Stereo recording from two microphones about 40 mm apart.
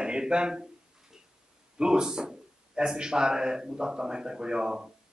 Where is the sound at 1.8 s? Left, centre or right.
Centre.